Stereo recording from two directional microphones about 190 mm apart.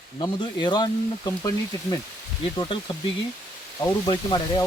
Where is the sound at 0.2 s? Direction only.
20° left (ahead or behind).